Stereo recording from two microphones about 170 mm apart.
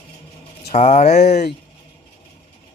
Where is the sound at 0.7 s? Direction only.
40° left (ahead or behind).